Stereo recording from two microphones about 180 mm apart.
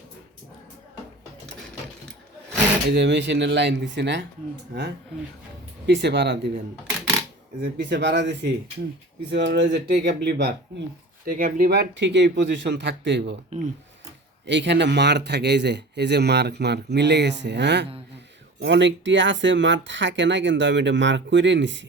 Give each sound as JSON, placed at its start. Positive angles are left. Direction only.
{"t": 2.9, "sound": "a man's voice", "side_deg": -75}
{"t": 5.8, "sound": "a man's voice", "side_deg": -70}
{"t": 7.6, "sound": "a man's voice", "side_deg": -70}
{"t": 11.3, "sound": "a man's voice", "side_deg": -50}
{"t": 14.4, "sound": "a man's voice", "side_deg": -80}